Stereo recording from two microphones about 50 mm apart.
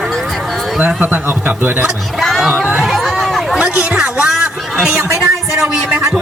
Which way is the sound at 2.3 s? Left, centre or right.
Centre.